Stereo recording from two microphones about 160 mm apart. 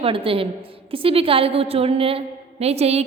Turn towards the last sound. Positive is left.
turn(degrees=-40)  # may be behind; listen again after turning